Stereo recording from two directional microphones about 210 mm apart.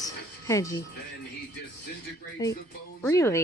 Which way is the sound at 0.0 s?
15° left (ahead or behind).